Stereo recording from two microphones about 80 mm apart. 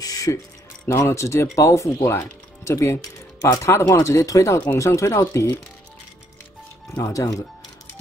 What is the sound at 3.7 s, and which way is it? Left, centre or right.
Speech, left.